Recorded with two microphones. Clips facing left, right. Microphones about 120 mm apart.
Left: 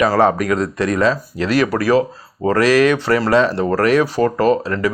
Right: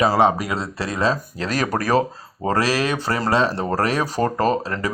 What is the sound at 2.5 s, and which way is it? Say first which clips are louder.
Speech: left 7 dB; 35° right (ahead or behind).